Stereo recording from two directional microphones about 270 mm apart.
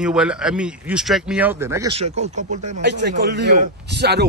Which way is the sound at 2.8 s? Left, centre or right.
Right.